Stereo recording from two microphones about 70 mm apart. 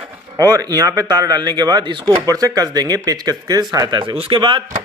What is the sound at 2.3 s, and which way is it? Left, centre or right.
Speech, right.